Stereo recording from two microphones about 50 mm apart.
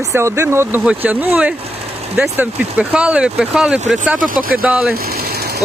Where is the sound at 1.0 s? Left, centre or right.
Right.